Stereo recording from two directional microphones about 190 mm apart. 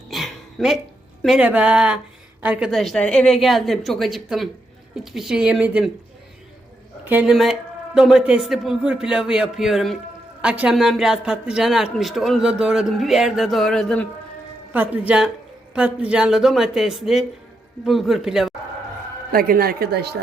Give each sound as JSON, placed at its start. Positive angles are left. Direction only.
{"t": 0.1, "sound": "a sound", "side_deg": 0}
{"t": 1.2, "sound": "speech", "side_deg": -5}
{"t": 7.0, "sound": "speech", "side_deg": -10}
{"t": 14.7, "sound": "speech", "side_deg": -5}
{"t": 19.3, "sound": "speech", "side_deg": -50}